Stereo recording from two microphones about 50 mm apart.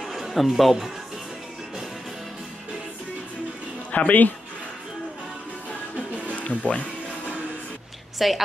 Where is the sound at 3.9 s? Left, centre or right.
Left.